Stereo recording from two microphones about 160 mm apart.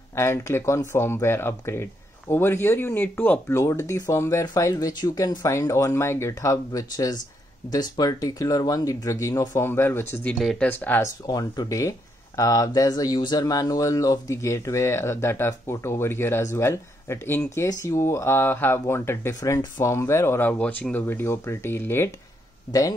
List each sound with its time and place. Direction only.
0.1 s speech: 15° left (ahead or behind)
10.3 s speech: centre (ahead or behind)
10.7 s speech: 10° left (ahead or behind)
11.2 s speech: 25° left (ahead or behind)